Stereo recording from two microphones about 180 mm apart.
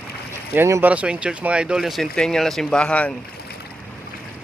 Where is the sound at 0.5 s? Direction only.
15° right (ahead or behind); by 3.1 s 5° left (ahead or behind).